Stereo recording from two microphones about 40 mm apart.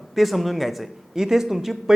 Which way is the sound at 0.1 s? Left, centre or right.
Centre.